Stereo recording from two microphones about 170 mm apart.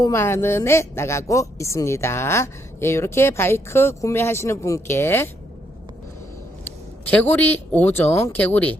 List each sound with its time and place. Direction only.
0.0 s speech: 15° left (ahead or behind)
6.7 s speech: 10° left (ahead or behind)